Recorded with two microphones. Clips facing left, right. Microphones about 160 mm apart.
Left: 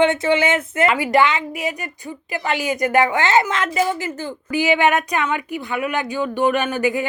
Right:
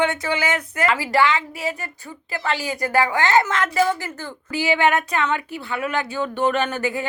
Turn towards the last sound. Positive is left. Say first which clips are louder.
# left 3 dB
turn(degrees=15)  # may be behind; listen again after turning